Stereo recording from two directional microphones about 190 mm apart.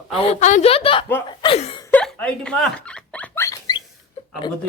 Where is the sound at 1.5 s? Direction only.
35° left (ahead or behind).